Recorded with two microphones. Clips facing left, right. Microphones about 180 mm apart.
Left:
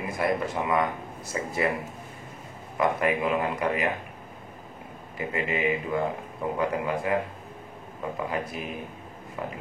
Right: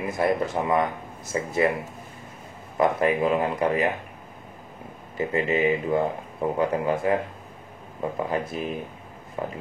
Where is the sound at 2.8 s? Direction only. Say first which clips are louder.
Right 3 dB; 30° right (ahead or behind).